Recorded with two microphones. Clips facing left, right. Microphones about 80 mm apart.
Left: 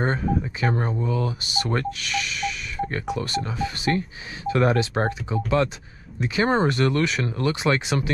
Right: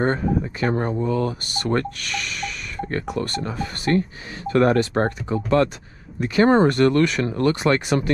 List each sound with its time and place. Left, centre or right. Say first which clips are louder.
0.0 s speech: right 3 dB; right
0.7 s speech: right 2 dB; right
0.9 s speech: right 4 dB; right
1.8 s music: right 1 dB; right
3.1 s speech: right 1 dB; right